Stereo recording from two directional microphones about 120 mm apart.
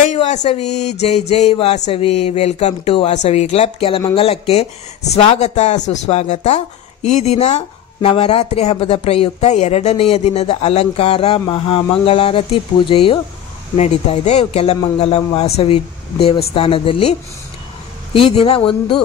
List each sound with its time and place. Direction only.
0.0 s a sound: 75° left (ahead or behind)
0.6 s speech: 70° left (ahead or behind)
3.2 s speech: 65° left (ahead or behind); by 13.2 s 50° left (ahead or behind)
13.7 s speech: 65° left (ahead or behind)
18.1 s speech: 50° left (ahead or behind)